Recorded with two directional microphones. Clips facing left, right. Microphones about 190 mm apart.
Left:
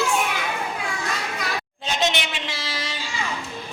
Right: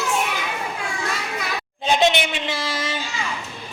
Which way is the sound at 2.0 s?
55° right (ahead or behind).